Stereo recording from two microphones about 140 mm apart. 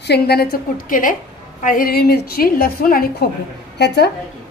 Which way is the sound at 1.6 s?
85° left.